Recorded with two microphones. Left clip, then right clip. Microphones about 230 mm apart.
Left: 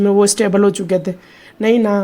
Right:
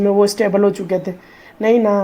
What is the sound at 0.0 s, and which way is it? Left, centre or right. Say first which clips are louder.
Speech: left 1 dB; left.